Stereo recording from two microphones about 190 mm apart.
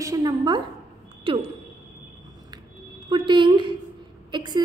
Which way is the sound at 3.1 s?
25° right (ahead or behind).